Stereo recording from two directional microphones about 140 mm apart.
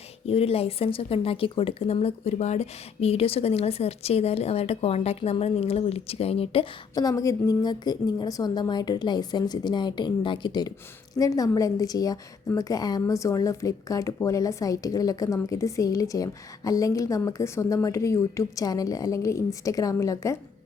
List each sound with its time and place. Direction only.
0.3 s speech: 45° left (ahead or behind)
6.9 s a woman's voice: 25° left (ahead or behind)